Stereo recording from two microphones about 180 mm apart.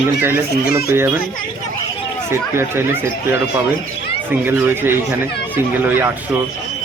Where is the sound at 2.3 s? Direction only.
15° right (ahead or behind).